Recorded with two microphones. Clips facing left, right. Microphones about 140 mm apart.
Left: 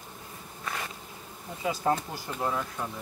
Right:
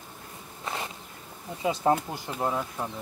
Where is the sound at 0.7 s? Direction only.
25° right (ahead or behind).